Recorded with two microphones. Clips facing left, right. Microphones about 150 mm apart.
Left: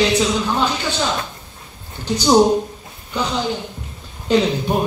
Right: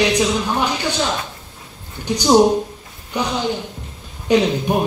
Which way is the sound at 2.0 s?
15° right (ahead or behind).